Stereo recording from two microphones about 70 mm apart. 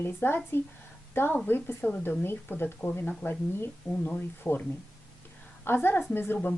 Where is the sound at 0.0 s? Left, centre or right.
Left.